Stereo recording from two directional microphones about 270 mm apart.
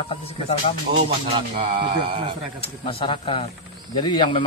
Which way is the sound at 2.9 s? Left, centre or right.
Centre.